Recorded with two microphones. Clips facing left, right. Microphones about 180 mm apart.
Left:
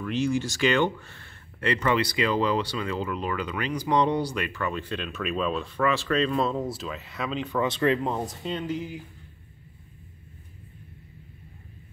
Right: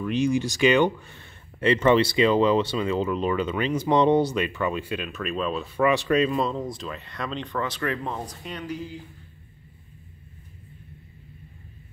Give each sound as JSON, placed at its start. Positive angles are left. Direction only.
{"t": 0.0, "sound": "speech", "side_deg": -15}
{"t": 5.8, "sound": "speech", "side_deg": -15}
{"t": 7.6, "sound": "speech", "side_deg": 25}